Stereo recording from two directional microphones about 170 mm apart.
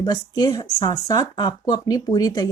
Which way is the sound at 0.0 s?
25° left (ahead or behind).